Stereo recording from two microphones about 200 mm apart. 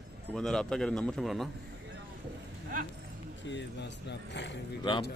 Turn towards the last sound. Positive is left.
turn(degrees=25)  # may be behind; listen again after turning